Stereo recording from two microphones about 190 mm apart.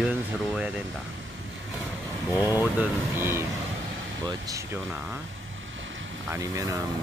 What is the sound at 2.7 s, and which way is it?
Speech, 10° right (ahead or behind).